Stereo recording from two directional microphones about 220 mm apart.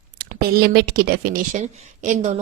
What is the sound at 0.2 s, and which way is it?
Speech, 45° right (ahead or behind).